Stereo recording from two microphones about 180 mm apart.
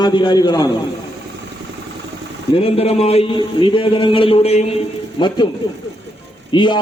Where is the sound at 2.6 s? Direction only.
35° left (ahead or behind).